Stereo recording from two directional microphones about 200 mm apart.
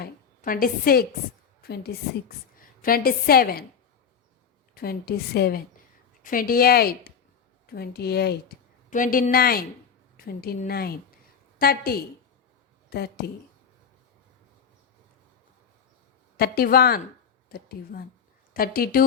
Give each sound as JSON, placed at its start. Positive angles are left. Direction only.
{"t": 0.0, "sound": "a woman's voice", "side_deg": 45}
{"t": 4.7, "sound": "a woman's voice", "side_deg": 50}
{"t": 8.9, "sound": "a woman's voice", "side_deg": 40}
{"t": 16.4, "sound": "a woman's voice", "side_deg": 50}